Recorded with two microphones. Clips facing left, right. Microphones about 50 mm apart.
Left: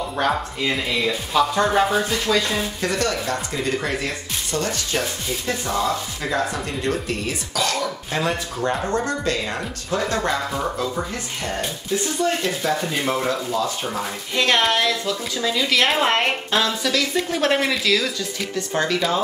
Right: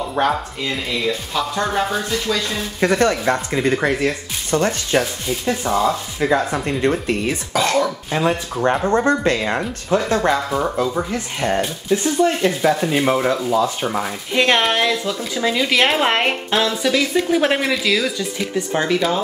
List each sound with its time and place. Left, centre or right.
0.3 s speech: centre
2.8 s speech: right
5.5 s speech: centre
6.5 s speech: right
8.1 s speech: centre
8.8 s speech: right
10.0 s speech: right
12.2 s speech: right
18.9 s speech: centre